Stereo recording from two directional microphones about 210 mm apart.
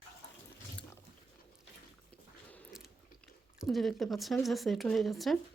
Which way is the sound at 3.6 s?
Centre (ahead or behind).